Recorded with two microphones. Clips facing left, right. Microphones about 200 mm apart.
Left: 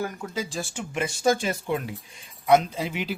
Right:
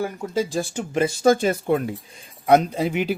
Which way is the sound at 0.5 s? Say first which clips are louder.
Right 7 dB; 40° right (ahead or behind).